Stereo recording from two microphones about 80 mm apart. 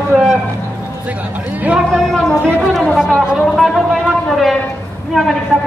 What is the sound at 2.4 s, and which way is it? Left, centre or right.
Speech, right.